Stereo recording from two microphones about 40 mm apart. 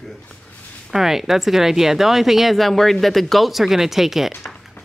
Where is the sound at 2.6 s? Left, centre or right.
Centre.